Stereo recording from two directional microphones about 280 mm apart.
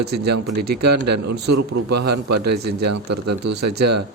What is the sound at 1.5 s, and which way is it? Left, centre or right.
A man's voice, right.